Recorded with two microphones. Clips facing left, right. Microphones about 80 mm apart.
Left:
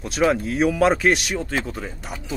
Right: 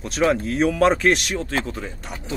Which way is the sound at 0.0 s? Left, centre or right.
Centre.